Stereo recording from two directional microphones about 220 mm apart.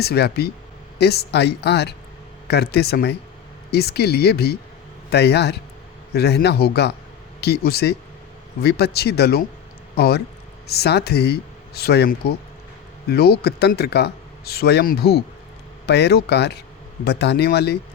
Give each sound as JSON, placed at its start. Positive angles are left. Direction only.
{"t": 0.0, "sound": "speech", "side_deg": 45}